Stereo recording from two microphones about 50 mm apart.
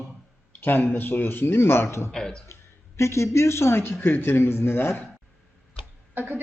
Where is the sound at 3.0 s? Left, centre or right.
Left.